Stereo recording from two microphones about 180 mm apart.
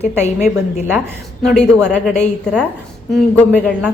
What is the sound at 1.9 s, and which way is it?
A woman's voice, 5° left (ahead or behind).